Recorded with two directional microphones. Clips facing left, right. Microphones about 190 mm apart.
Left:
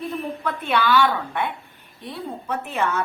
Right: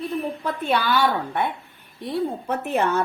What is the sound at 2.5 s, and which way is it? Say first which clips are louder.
Speech: right 1 dB; 45° right (ahead or behind).